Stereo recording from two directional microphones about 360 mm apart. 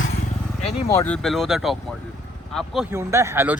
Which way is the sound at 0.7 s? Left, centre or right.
Centre.